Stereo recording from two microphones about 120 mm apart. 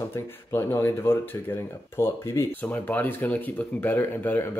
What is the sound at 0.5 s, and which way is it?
Speech, 20° left (ahead or behind).